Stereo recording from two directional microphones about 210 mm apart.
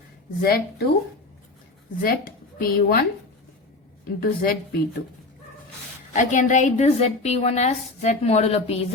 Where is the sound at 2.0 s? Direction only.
45° left (ahead or behind).